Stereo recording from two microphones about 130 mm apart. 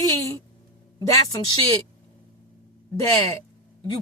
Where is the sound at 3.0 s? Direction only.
25° left (ahead or behind).